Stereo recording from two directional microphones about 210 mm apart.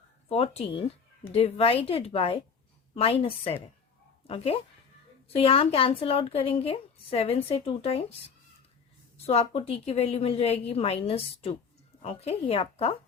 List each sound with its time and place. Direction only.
0.3 s a woman's voice: 30° left (ahead or behind)
9.2 s a woman's voice: 30° left (ahead or behind)